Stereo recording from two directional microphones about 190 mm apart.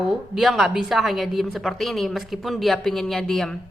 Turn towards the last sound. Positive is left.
turn(degrees=0)  # may be behind; listen again after turning